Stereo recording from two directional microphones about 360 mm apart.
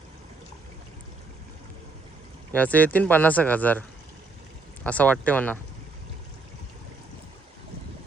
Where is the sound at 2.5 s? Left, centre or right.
Centre.